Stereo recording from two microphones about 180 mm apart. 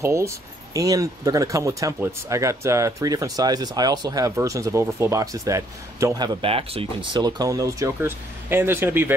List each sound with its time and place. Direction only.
0.0 s speech: 15° right (ahead or behind)